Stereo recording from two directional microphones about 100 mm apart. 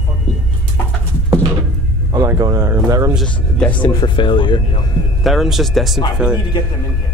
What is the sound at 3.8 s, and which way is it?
Speech, 55° left (ahead or behind).